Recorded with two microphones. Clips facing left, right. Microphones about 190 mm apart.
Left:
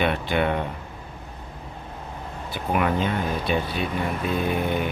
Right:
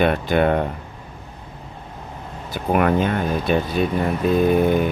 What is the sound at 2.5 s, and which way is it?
Speech, 50° right (ahead or behind).